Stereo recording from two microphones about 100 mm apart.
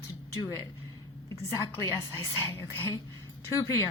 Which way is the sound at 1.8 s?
25° left (ahead or behind).